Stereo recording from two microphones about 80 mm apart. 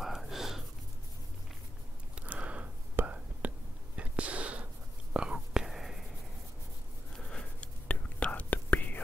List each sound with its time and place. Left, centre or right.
0.0 s a sound: centre
2.1 s whispering: centre
7.2 s whispering: centre